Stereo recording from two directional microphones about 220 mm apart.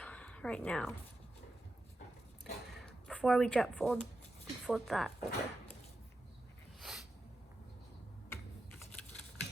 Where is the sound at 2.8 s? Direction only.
5° left (ahead or behind).